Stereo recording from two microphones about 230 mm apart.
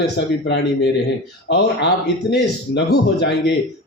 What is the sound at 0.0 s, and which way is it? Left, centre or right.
Speech, left.